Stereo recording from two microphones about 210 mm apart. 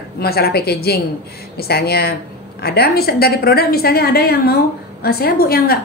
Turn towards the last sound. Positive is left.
turn(degrees=45)  # may be behind; listen again after turning